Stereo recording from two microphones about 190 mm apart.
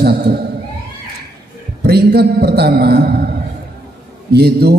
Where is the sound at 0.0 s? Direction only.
55° right (ahead or behind).